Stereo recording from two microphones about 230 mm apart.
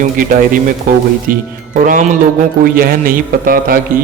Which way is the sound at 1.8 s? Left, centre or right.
Right.